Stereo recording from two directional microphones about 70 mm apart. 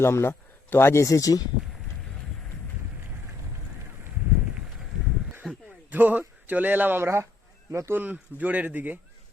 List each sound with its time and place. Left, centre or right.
0.0 s speech: left
1.0 s speech: left
5.5 s a sound: centre
5.9 s speech: right
7.9 s speech: right